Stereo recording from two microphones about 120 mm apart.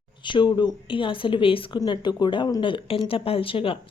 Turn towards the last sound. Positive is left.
turn(degrees=50)  # may be behind; listen again after turning